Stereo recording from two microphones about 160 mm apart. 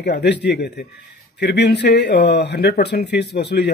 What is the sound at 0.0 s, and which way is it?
Speech, 90° left.